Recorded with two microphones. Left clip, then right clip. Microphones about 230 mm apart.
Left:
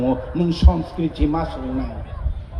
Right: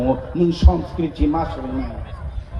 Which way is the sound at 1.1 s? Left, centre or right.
Left.